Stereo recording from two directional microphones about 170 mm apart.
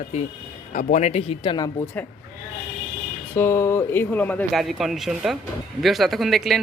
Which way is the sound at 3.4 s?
15° left (ahead or behind).